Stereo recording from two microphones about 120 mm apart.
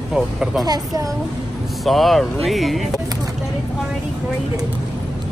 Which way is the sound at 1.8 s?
Centre (ahead or behind).